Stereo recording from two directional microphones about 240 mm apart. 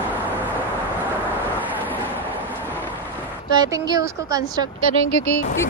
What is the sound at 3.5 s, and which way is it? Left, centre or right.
Speech, centre.